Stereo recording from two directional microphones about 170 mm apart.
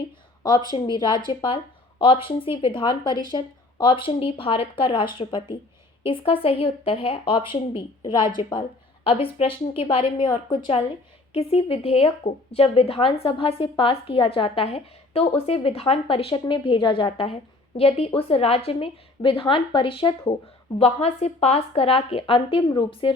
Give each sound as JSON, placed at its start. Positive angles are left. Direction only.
{"t": 0.4, "sound": "a woman's voice", "side_deg": 25}
{"t": 11.3, "sound": "a woman's voice", "side_deg": 35}